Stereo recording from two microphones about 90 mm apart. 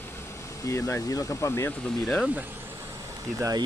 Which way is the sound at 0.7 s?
30° left (ahead or behind).